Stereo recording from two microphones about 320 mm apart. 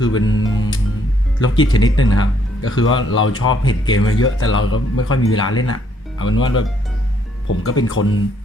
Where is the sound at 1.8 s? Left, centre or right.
Left.